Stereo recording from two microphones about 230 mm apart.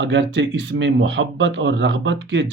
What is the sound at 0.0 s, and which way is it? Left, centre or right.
Speech, right.